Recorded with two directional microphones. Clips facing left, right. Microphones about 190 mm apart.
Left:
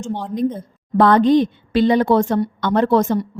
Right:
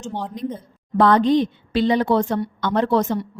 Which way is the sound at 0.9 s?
50° left (ahead or behind).